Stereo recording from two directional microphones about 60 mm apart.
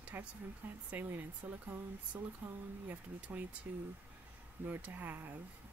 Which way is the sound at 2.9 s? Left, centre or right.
Right.